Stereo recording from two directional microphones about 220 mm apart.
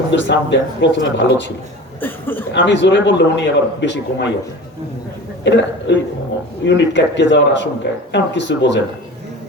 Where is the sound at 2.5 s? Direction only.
55° left (ahead or behind).